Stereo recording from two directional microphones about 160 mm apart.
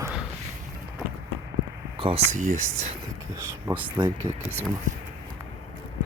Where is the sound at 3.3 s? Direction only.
15° right (ahead or behind).